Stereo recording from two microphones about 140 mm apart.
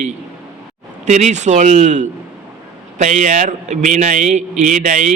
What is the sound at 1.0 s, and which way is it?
A man's voice, 55° right (ahead or behind).